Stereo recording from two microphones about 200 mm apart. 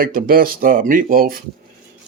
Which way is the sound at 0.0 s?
45° right (ahead or behind).